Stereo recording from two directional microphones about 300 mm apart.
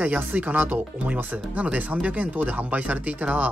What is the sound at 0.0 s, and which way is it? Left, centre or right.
Speech, centre.